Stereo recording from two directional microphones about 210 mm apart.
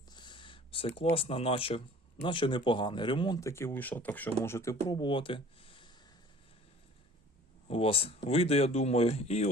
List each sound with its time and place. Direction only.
0.1 s a sound: 20° left (ahead or behind)
2.2 s speech: 25° left (ahead or behind)
7.7 s speech: 25° left (ahead or behind)